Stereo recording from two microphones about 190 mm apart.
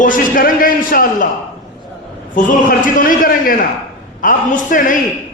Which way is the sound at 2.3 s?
45° left (ahead or behind).